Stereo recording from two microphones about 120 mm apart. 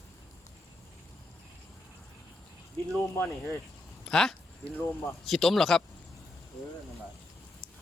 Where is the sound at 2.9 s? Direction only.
20° left (ahead or behind).